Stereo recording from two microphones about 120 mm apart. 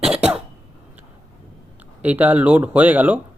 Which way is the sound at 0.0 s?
10° right (ahead or behind).